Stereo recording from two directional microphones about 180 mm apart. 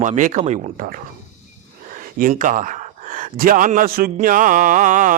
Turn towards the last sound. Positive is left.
turn(degrees=-45)  # may be behind; listen again after turning